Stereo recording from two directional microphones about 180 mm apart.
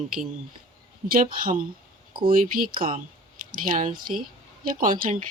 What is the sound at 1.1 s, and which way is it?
Speech, 50° right (ahead or behind).